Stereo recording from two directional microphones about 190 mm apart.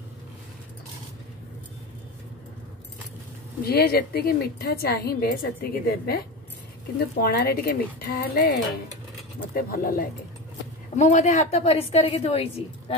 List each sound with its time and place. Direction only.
3.6 s a woman's voice: 55° left (ahead or behind); by 12.9 s 30° left (ahead or behind)